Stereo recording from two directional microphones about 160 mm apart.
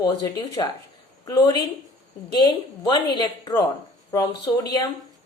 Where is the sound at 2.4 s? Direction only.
25° left (ahead or behind).